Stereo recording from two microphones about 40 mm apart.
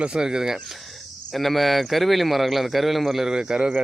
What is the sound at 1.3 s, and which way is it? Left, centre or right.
A man's voice, centre.